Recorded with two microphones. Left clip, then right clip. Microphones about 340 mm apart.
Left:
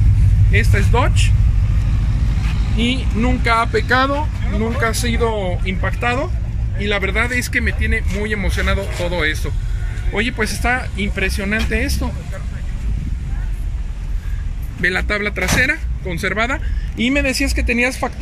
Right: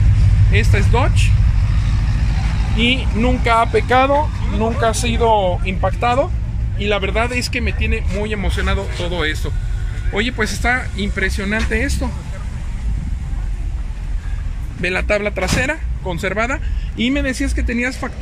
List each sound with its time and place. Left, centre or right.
0.5 s speech: centre
2.8 s speech: centre
14.8 s speech: centre
15.5 s speech: right
16.1 s speech: centre